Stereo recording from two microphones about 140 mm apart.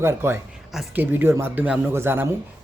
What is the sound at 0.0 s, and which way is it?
A man's voice, 20° right (ahead or behind).